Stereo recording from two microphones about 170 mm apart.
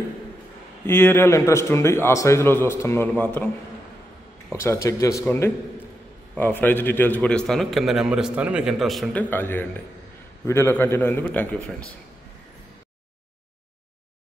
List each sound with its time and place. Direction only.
0.8 s a man's voice: 15° left (ahead or behind)
4.6 s a man's voice: 15° left (ahead or behind); by 9.2 s centre (ahead or behind)
9.3 s a man's voice: 10° left (ahead or behind)